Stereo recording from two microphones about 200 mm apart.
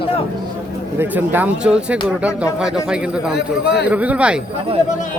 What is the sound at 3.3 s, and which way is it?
Speech, 55° left (ahead or behind).